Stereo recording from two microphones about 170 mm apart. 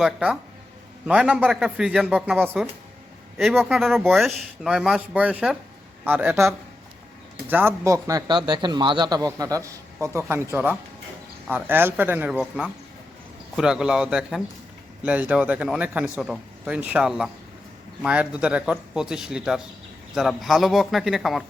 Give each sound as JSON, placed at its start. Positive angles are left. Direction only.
{"t": 0.0, "sound": "a man's voice", "side_deg": -5}
{"t": 3.6, "sound": "a man's voice", "side_deg": 0}